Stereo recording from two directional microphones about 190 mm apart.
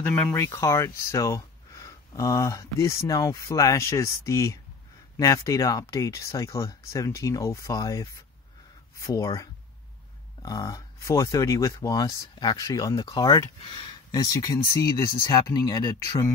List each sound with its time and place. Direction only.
0.0 s speech: 5° left (ahead or behind)